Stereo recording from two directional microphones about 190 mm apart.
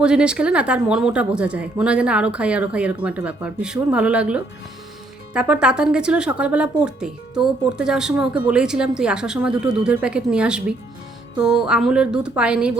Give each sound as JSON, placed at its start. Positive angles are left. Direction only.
{"t": 0.0, "sound": "speech", "side_deg": -5}